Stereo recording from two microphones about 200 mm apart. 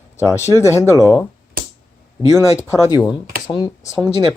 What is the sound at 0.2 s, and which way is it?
Speech, 15° left (ahead or behind).